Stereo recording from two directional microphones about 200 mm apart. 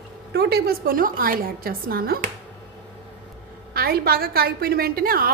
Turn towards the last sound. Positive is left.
turn(degrees=-45)  # may be behind; listen again after turning